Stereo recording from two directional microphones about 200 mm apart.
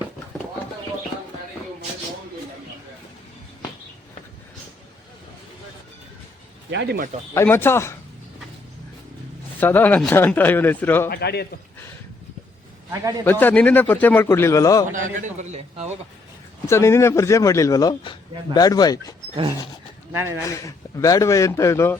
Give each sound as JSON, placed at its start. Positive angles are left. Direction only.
{"t": 6.7, "sound": "speech", "side_deg": -60}
{"t": 7.3, "sound": "a man's voice", "side_deg": 10}
{"t": 9.6, "sound": "a man's voice", "side_deg": 10}
{"t": 11.1, "sound": "a man's voice", "side_deg": 55}
{"t": 12.9, "sound": "a man's voice", "side_deg": -20}
{"t": 13.4, "sound": "a man's voice", "side_deg": 5}
{"t": 14.9, "sound": "a man's voice", "side_deg": -40}
{"t": 16.6, "sound": "a man's voice", "side_deg": 15}
{"t": 20.1, "sound": "a man's voice", "side_deg": -10}
{"t": 20.4, "sound": "a man's voice", "side_deg": 15}